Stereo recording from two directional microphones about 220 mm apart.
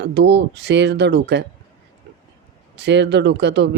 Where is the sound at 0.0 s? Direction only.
50° right (ahead or behind).